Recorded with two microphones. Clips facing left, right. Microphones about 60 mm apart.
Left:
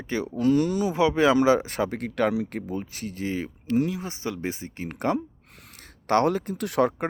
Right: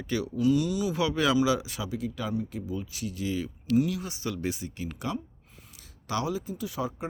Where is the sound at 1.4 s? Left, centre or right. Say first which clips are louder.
Left 6 dB; left.